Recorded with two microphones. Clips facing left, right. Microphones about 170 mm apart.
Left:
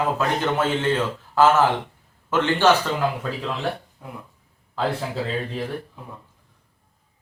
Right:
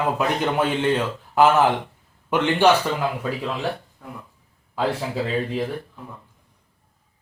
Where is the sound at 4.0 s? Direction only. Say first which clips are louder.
Even; 10° left (ahead or behind).